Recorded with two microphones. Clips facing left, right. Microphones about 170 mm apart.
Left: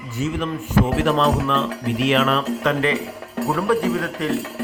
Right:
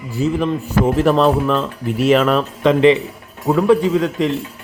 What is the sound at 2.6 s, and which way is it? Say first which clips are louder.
A man's voice: right 8 dB; 20° right (ahead or behind).